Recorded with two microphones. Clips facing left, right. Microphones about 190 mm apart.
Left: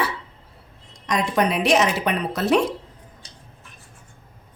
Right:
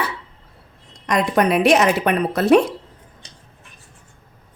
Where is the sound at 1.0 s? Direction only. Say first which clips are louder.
Right 4 dB; 60° right (ahead or behind).